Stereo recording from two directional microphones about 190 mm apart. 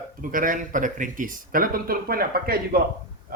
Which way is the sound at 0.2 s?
45° right (ahead or behind).